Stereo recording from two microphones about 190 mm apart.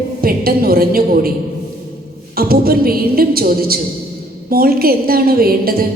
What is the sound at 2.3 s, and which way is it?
A woman's voice, 50° right (ahead or behind).